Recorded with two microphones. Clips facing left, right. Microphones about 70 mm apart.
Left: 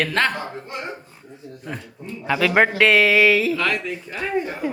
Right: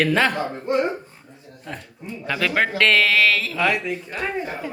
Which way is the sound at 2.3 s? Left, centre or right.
Centre.